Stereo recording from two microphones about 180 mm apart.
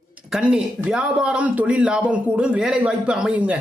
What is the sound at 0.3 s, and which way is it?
A man's voice, 5° right (ahead or behind).